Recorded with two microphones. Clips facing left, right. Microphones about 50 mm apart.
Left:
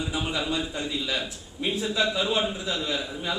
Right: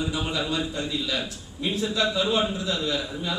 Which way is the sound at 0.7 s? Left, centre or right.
Centre.